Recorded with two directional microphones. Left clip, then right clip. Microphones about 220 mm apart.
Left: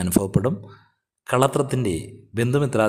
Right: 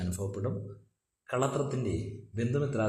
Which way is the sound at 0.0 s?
40° left (ahead or behind).